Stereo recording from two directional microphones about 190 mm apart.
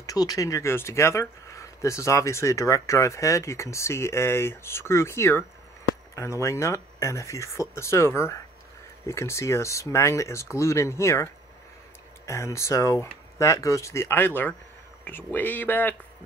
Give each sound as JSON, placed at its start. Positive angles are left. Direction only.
{"t": 0.0, "sound": "speech", "side_deg": 20}
{"t": 12.3, "sound": "speech", "side_deg": 15}